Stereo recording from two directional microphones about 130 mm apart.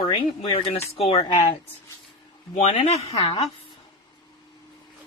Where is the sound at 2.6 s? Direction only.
55° left (ahead or behind).